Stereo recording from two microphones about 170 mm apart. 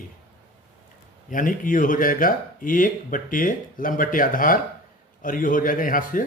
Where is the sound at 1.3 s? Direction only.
50° left (ahead or behind).